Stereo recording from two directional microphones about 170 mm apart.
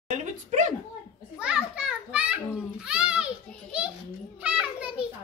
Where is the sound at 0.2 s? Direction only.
45° right (ahead or behind).